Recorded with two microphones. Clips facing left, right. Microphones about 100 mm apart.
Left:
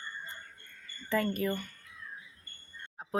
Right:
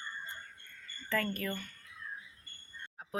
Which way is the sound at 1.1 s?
20° left (ahead or behind).